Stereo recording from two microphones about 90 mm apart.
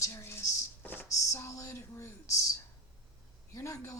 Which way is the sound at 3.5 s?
35° left (ahead or behind).